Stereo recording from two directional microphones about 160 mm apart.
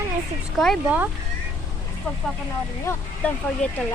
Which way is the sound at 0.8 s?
10° right (ahead or behind).